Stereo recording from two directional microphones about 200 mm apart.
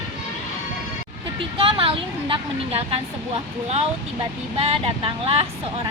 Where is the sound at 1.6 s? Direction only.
25° right (ahead or behind).